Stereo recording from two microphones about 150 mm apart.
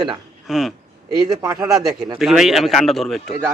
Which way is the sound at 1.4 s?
20° right (ahead or behind).